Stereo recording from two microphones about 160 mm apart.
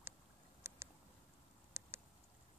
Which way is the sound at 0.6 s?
15° right (ahead or behind).